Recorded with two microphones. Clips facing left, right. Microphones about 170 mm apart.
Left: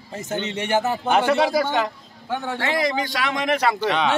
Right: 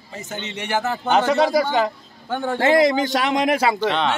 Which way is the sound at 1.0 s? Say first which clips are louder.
Right 4 dB; 10° left (ahead or behind).